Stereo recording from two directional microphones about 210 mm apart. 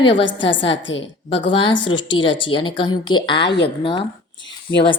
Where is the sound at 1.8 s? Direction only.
25° left (ahead or behind).